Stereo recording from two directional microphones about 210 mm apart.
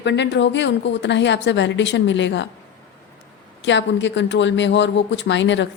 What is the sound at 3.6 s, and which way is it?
A woman's voice, 60° left (ahead or behind).